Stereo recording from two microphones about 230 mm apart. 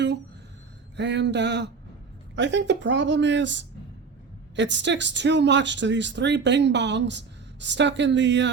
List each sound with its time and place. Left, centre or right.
0.9 s speech: right